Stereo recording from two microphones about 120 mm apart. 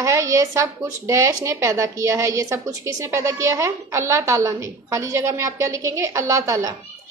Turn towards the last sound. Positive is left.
turn(degrees=-25)  # may be behind; listen again after turning